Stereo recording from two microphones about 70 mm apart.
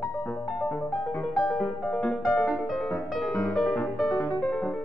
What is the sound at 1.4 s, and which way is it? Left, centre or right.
Music, centre.